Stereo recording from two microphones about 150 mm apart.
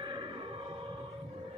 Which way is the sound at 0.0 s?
30° right (ahead or behind).